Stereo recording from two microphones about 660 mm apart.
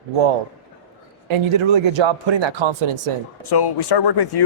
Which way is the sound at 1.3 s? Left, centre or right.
Right.